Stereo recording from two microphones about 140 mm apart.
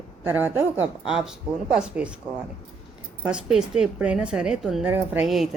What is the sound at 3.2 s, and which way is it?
A woman's voice, 5° right (ahead or behind).